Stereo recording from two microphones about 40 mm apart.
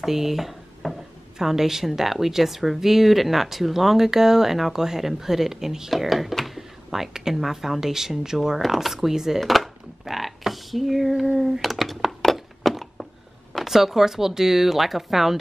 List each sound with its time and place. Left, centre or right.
0.0 s speech: centre
1.4 s speech: centre
9.4 s a sound: centre
13.5 s speech: centre